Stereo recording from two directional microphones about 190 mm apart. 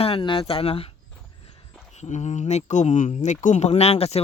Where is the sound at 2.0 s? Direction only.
35° left (ahead or behind).